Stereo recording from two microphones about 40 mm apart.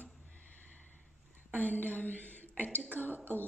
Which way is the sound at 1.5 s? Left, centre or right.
Left.